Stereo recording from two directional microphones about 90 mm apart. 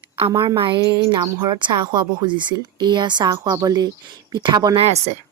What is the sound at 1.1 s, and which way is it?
Speech, 50° right (ahead or behind).